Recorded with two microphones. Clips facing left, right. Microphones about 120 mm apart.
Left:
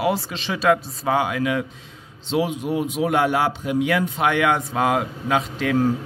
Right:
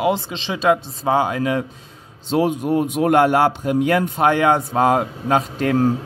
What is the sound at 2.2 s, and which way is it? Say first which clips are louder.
Speech: right 4 dB; 45° right (ahead or behind).